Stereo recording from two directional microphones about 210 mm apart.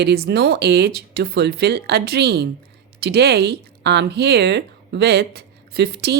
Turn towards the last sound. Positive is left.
turn(degrees=-50)  # may be behind; listen again after turning